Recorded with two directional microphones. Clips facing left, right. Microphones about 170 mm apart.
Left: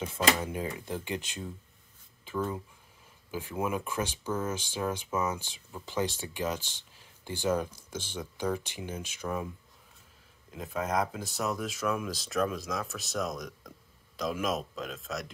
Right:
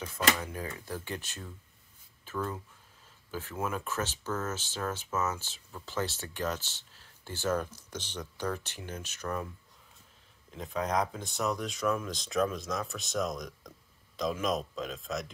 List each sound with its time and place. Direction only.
0.0 s speech: 25° left (ahead or behind)
10.5 s speech: 5° left (ahead or behind)